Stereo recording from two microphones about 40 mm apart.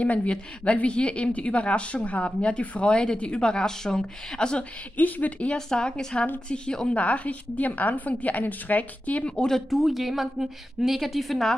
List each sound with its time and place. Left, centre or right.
0.0 s a woman's voice: left
4.9 s a woman's voice: left
5.7 s a woman's voice: centre
7.0 s a woman's voice: left
9.7 s a woman's voice: centre